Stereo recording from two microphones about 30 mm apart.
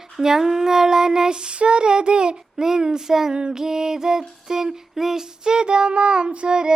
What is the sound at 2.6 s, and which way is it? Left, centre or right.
Child singing, right.